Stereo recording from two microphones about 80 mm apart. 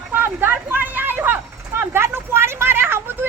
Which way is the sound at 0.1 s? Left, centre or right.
Right.